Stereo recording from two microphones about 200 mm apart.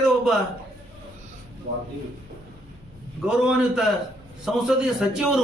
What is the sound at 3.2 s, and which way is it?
Speech, 5° right (ahead or behind).